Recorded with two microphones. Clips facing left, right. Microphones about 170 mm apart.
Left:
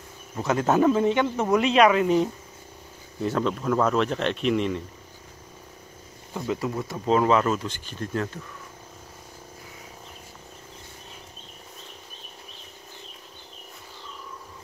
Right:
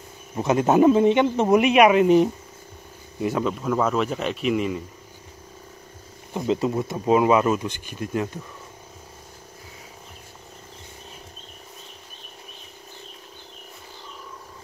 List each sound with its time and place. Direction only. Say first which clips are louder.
0.4 s speech: right 4 dB; 20° right (ahead or behind)
6.3 s speech: right 5 dB; 20° right (ahead or behind)